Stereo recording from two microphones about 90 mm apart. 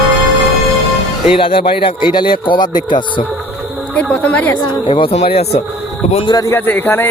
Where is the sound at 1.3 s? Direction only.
90° left; by 3.2 s 65° left (ahead or behind).